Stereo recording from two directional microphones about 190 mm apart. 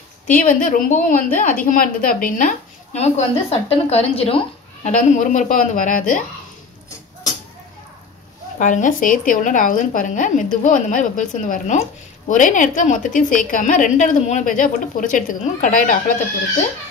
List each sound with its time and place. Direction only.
0.3 s a woman's voice: 45° left (ahead or behind)
4.9 s a woman's voice: 40° left (ahead or behind)
8.5 s a woman's voice: 40° left (ahead or behind)